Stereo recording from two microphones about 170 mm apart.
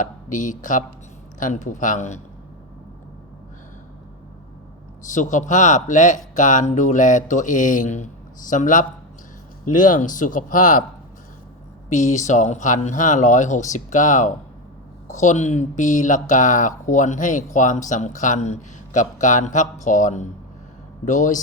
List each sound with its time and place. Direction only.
0.0 s speech: 50° left (ahead or behind)
5.0 s speech: 45° left (ahead or behind)
11.9 s speech: 45° left (ahead or behind)